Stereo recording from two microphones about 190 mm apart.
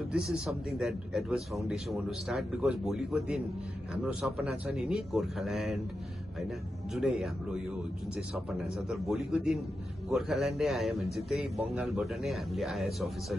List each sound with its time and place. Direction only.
0.1 s a man's voice: centre (ahead or behind)
6.9 s a man's voice: centre (ahead or behind)
8.5 s a man's voice: 5° right (ahead or behind)